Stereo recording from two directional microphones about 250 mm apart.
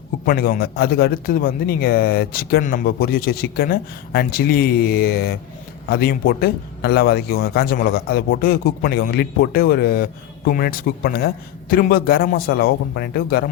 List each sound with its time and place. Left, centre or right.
0.3 s a man's voice: left